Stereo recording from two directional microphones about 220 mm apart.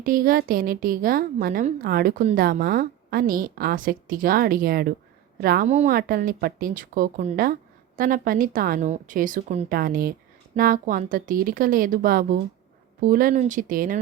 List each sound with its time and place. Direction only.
0.0 s a woman's voice: 40° right (ahead or behind)
5.6 s a woman's voice: 30° right (ahead or behind)
5.9 s a woman's voice: 40° right (ahead or behind)